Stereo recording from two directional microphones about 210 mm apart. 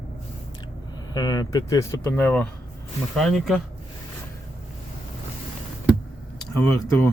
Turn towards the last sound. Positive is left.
turn(degrees=10)  # may be behind; listen again after turning